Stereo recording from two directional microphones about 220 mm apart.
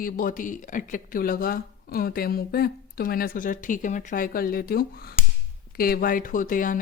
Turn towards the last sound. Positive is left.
turn(degrees=40)  # may be behind; listen again after turning